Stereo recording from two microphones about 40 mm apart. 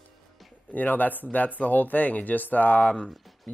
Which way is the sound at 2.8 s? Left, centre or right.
Centre.